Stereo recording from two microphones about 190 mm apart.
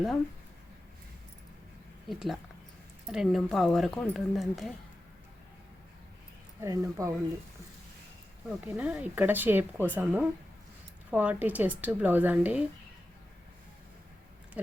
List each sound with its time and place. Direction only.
2.0 s speech: centre (ahead or behind)
6.6 s speech: 15° right (ahead or behind)
8.4 s speech: 5° right (ahead or behind)